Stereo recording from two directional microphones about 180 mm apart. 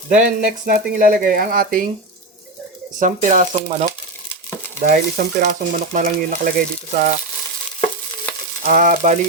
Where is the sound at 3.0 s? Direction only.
45° right (ahead or behind).